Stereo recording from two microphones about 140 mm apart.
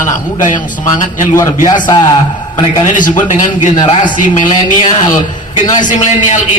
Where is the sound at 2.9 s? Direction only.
65° left (ahead or behind).